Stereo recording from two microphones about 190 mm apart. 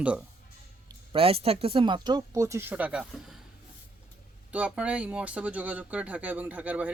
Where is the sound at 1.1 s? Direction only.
30° right (ahead or behind); by 3.2 s 5° right (ahead or behind).